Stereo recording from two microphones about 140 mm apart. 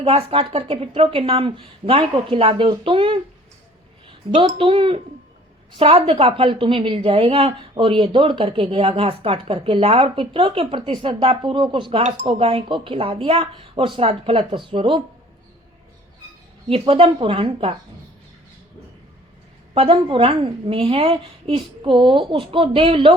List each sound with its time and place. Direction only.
0.0 s a woman's voice: 45° right (ahead or behind)
4.5 s a woman's voice: 40° right (ahead or behind)
16.6 s a woman's voice: 40° right (ahead or behind)
19.7 s a woman's voice: 40° right (ahead or behind)